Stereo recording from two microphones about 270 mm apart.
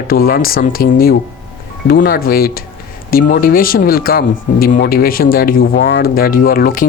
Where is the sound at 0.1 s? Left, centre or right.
Left.